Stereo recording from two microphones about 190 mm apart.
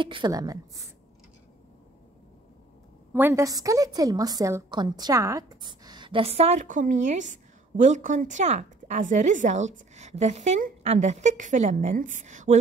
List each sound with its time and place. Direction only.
0.0 s a woman's voice: 25° right (ahead or behind)
3.1 s a woman's voice: 10° right (ahead or behind); by 12.5 s 40° right (ahead or behind)